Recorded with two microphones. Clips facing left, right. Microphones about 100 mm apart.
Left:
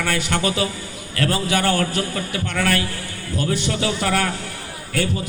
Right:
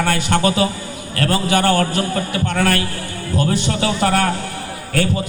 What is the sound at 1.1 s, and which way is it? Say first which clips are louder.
Speech: right 3 dB; 40° right (ahead or behind).